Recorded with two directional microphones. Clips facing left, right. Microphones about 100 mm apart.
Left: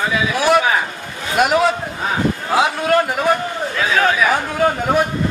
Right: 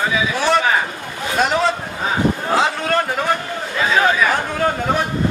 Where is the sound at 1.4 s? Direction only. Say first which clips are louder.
Left 3 dB; 5° left (ahead or behind).